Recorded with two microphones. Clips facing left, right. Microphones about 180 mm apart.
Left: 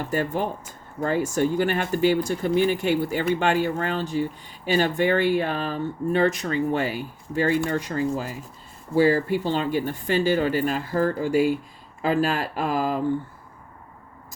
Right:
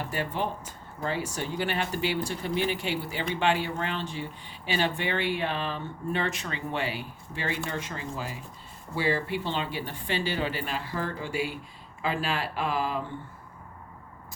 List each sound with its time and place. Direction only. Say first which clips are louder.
0.1 s speech: left 7 dB; 45° left (ahead or behind)